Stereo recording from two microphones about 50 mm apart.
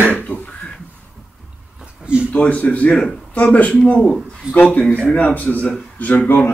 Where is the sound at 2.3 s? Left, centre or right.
Left.